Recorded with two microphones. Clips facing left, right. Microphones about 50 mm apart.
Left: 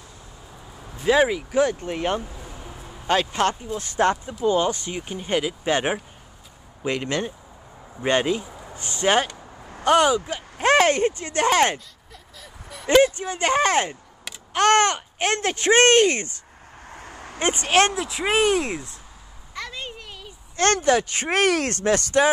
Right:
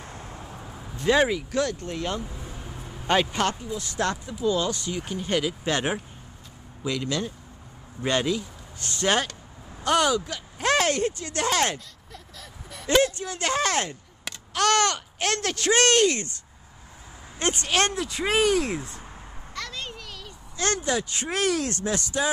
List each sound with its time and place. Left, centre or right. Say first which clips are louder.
0.0 s vehicle: right 5 dB; right
0.9 s speech: left 2 dB; centre
1.6 s speech: left 8 dB; left
3.1 s speech: left 1 dB; centre
3.6 s speech: left 6 dB; left
6.8 s speech: left 3 dB; left
12.1 s vehicle: even; centre
12.8 s speech: left 5 dB; left
16.9 s a sound: left 7 dB; left
17.4 s speech: left 5 dB; left
17.9 s speech: left 2 dB; centre
19.5 s a sound: left 2 dB; centre
20.5 s speech: left 7 dB; left